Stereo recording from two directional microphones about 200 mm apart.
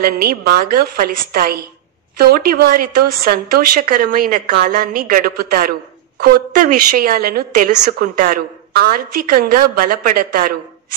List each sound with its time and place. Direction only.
0.0 s a woman's voice: 50° right (ahead or behind)